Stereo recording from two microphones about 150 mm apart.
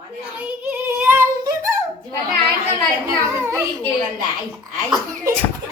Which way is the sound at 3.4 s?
15° right (ahead or behind).